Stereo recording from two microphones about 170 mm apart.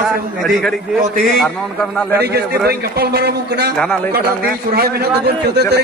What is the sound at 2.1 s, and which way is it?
A man's voice, 70° right (ahead or behind).